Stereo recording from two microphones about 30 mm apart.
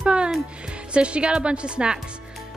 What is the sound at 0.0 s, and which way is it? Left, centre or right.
Music, right.